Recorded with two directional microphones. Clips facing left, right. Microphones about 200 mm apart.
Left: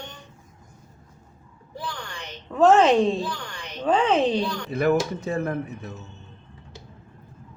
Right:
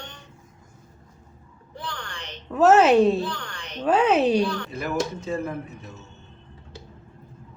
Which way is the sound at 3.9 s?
10° right (ahead or behind).